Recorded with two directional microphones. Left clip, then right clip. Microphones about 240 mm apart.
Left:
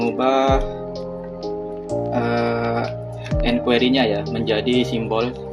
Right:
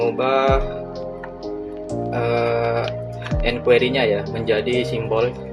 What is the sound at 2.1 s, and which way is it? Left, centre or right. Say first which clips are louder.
Music: right 1 dB; left.